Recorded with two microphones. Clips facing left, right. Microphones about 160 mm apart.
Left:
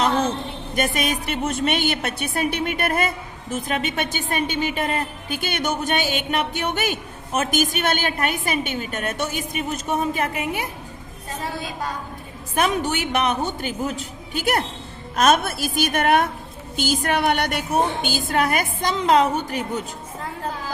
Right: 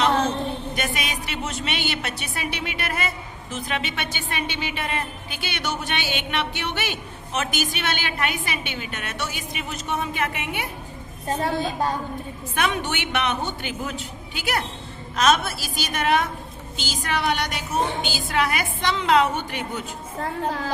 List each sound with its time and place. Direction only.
0.8 s a woman's voice: 45° left (ahead or behind)
12.5 s a woman's voice: 40° left (ahead or behind)